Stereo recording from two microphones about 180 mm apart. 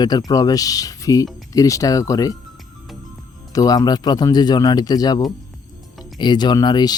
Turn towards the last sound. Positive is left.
turn(degrees=20)  # may be behind; listen again after turning